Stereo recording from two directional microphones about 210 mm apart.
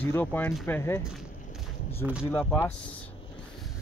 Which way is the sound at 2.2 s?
10° left (ahead or behind).